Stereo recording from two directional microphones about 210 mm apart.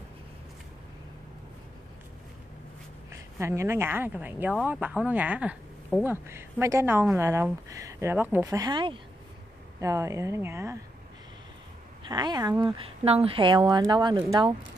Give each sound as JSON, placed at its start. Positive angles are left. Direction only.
{"t": 3.1, "sound": "speech", "side_deg": -15}
{"t": 12.1, "sound": "speech", "side_deg": -20}